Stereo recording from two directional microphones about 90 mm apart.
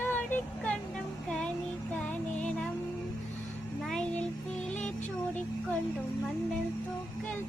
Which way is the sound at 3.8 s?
10° left (ahead or behind).